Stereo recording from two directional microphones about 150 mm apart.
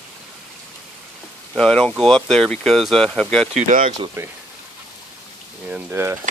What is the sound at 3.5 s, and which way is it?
Speech, 60° right (ahead or behind).